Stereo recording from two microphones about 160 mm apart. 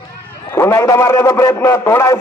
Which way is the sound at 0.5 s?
15° left (ahead or behind).